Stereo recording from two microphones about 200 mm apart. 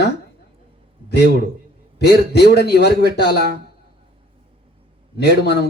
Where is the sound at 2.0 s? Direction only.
55° left (ahead or behind).